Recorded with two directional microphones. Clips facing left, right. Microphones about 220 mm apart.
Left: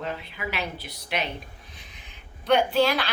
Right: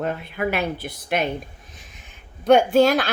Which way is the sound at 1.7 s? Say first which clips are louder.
Right 2 dB; 45° right (ahead or behind).